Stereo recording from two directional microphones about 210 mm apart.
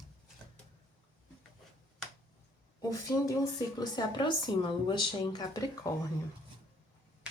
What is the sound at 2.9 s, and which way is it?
A woman's voice, 15° left (ahead or behind).